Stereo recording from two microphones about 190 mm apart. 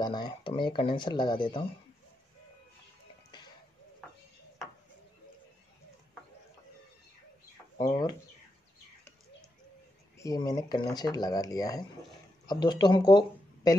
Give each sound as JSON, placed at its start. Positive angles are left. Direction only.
{"t": 0.0, "sound": "speech", "side_deg": 20}
{"t": 7.8, "sound": "speech", "side_deg": 20}
{"t": 10.1, "sound": "speech", "side_deg": 20}